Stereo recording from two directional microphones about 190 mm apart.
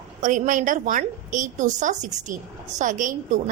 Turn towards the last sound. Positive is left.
turn(degrees=-40)  # may be behind; listen again after turning